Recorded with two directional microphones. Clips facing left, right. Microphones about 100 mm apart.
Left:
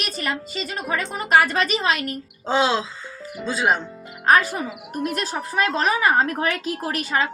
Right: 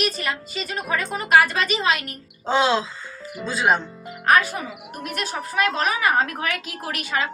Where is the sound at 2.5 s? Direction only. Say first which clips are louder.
Right 1 dB; 30° left (ahead or behind).